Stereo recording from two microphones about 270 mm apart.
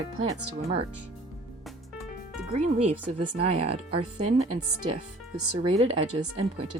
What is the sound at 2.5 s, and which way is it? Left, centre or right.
Speech, right.